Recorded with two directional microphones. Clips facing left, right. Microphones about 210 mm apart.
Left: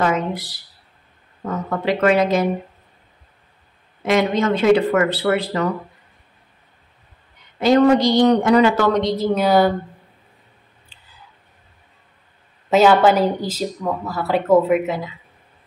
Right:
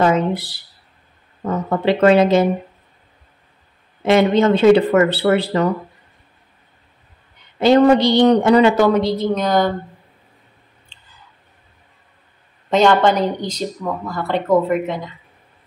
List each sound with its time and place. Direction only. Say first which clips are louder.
0.0 s a sound: right 4 dB; 30° right (ahead or behind)
1.4 s speech: right 4 dB; 30° right (ahead or behind)
4.0 s speech: right 4 dB; 30° right (ahead or behind)
7.6 s speech: right 2 dB; 30° right (ahead or behind)
8.7 s a woman's voice: right 3 dB; 10° right (ahead or behind); by 9.7 s 5° left (ahead or behind)
10.9 s a sound: even; 5° left (ahead or behind)
12.6 s a woman's voice: left 1 dB; 5° left (ahead or behind)